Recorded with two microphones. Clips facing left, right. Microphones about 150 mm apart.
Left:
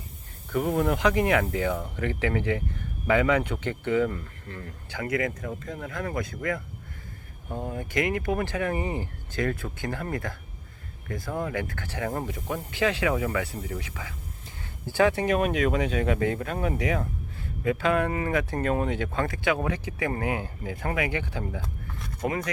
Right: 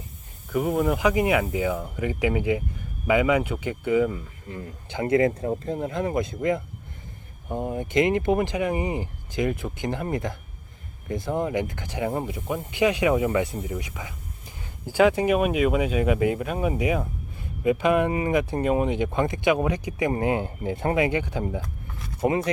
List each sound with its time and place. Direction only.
0.5 s speech: 5° right (ahead or behind); by 22.4 s 25° right (ahead or behind)